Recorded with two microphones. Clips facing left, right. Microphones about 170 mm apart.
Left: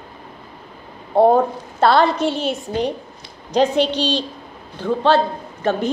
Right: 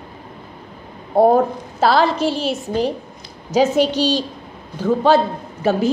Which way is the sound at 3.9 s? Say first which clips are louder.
Right 3 dB; 40° right (ahead or behind).